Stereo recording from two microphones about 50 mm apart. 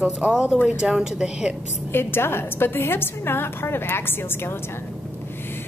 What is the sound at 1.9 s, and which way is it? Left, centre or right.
A woman's voice, left.